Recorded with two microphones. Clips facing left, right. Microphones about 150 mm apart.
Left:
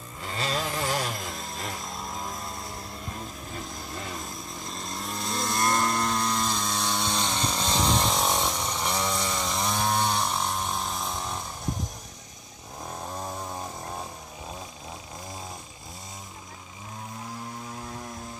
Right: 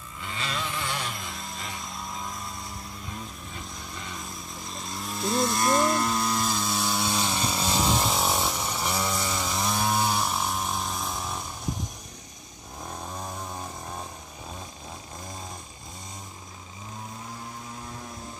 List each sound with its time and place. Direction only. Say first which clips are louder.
0.2 s chainsaw: left 3 dB; 40° left (ahead or behind)
1.8 s vehicle: left 1 dB; centre (ahead or behind)
3.9 s a sound: left 4 dB; 40° left (ahead or behind)
4.3 s chainsaw: left 1 dB; centre (ahead or behind)